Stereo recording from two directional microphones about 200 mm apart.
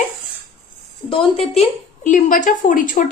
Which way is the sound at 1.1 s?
30° left (ahead or behind).